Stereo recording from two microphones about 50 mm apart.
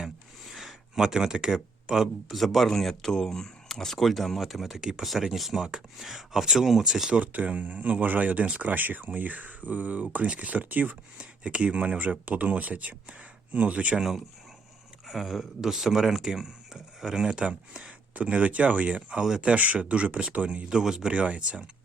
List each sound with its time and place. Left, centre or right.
0.5 s a sound: centre
1.0 s speech: centre
2.3 s speech: centre
7.1 s speech: right
13.9 s speech: centre; by 20.7 s right
20.7 s speech: centre